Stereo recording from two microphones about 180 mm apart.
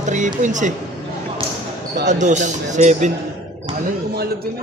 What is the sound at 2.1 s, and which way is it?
Speech, 40° right (ahead or behind).